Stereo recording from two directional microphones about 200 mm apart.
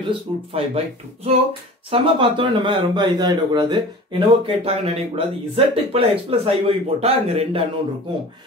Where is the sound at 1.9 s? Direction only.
25° right (ahead or behind).